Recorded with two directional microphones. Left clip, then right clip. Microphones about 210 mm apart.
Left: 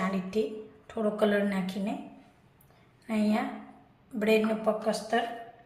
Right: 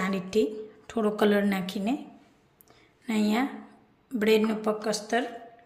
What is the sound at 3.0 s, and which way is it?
A woman's voice, 50° right (ahead or behind).